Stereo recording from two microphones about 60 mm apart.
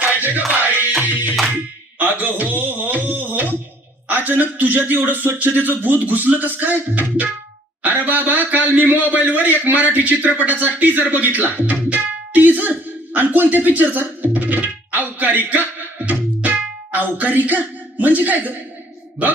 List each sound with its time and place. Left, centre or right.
0.0 s music: right
2.0 s a sound: right
4.1 s speech: right